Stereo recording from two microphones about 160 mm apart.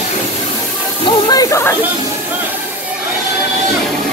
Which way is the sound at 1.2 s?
20° left (ahead or behind).